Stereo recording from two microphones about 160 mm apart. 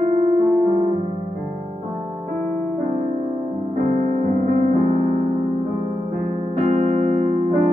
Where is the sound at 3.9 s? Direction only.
45° right (ahead or behind).